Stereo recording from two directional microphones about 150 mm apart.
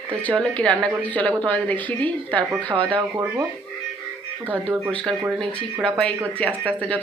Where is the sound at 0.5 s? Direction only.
5° left (ahead or behind).